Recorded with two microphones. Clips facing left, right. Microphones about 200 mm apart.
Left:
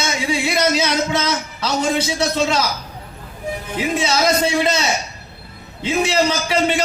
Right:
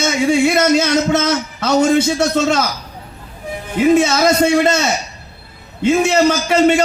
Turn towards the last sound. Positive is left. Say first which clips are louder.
# right 6 dB
turn(degrees=-50)  # may be behind; listen again after turning